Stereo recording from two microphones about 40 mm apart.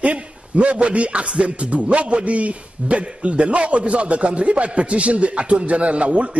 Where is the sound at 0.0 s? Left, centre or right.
Right.